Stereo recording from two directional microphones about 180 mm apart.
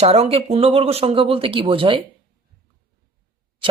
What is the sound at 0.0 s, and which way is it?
Speech, 35° right (ahead or behind).